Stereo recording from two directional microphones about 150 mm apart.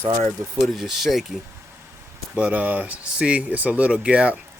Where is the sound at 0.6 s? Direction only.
Centre (ahead or behind).